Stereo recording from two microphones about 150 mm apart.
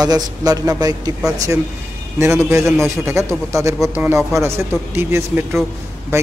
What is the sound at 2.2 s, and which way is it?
A man's voice, 15° right (ahead or behind).